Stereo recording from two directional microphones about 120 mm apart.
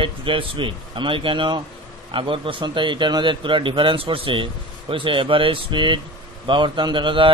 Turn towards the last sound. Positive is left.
turn(degrees=-45)  # may be behind; listen again after turning